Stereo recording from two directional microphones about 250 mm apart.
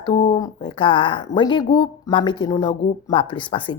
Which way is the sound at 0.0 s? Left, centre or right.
Centre.